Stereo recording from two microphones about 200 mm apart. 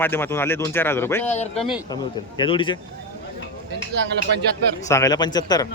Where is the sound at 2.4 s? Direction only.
25° left (ahead or behind).